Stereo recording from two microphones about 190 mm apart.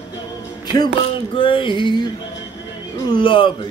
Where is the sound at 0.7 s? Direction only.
25° left (ahead or behind).